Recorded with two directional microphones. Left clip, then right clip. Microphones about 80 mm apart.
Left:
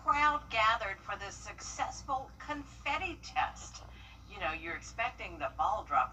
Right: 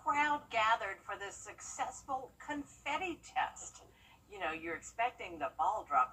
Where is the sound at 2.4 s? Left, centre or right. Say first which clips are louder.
Left 3 dB; centre.